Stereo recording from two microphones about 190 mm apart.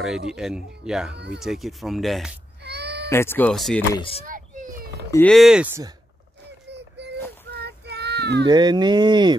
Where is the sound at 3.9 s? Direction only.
30° left (ahead or behind).